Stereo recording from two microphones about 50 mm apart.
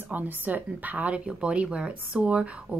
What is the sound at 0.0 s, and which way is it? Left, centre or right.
Speech, right.